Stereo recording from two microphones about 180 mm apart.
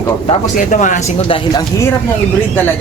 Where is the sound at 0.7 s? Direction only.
45° left (ahead or behind).